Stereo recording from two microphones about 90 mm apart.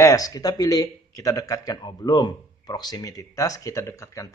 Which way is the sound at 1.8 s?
55° left (ahead or behind).